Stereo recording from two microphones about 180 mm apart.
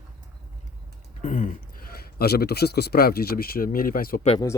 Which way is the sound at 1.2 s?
45° left (ahead or behind).